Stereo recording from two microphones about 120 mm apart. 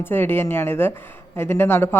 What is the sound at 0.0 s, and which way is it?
Speech, 20° left (ahead or behind).